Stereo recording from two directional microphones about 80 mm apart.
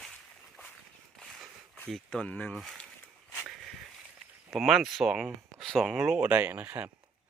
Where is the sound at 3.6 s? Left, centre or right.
Centre.